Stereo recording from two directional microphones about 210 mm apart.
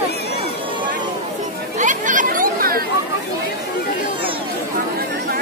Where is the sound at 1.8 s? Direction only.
35° right (ahead or behind).